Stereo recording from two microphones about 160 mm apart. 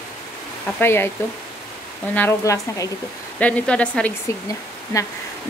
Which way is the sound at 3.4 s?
10° left (ahead or behind).